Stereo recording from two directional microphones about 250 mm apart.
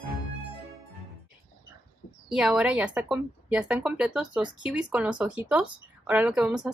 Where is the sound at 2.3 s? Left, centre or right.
Centre.